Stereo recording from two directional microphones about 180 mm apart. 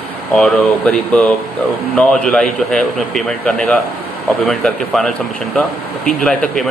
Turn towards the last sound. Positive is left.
turn(degrees=5)  # may be behind; listen again after turning